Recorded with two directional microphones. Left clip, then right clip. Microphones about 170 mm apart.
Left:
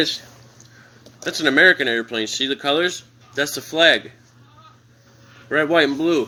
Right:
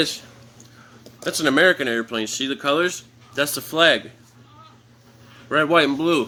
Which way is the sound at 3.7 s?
30° right (ahead or behind).